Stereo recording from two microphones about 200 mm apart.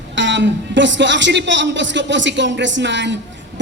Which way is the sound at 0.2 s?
65° right (ahead or behind).